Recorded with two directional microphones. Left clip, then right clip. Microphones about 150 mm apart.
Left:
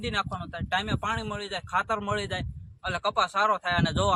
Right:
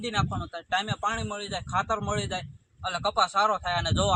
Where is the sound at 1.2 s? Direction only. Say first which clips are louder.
Even; 40° left (ahead or behind).